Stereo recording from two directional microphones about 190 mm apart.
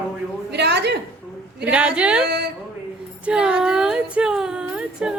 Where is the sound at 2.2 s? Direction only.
60° right (ahead or behind).